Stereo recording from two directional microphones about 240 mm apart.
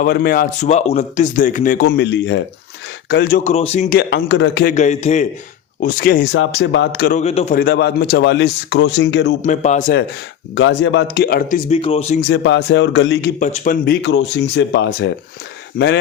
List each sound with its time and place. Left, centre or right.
0.0 s speech: left
3.5 s speech: left
4.7 s a man's voice: left
7.2 s a man's voice: left
7.6 s a man's voice: left
9.4 s a man's voice: left
10.5 s a man's voice: left
12.3 s a man's voice: left
13.4 s a man's voice: left